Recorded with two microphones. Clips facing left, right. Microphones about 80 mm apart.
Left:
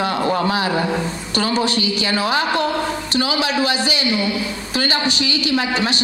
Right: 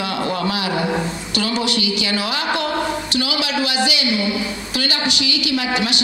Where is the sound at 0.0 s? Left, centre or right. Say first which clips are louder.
Left 3 dB; left.